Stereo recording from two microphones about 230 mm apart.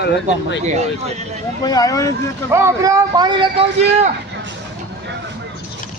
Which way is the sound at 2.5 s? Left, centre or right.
Centre.